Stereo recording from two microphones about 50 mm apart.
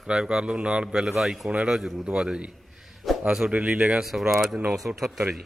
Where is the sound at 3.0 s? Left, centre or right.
Centre.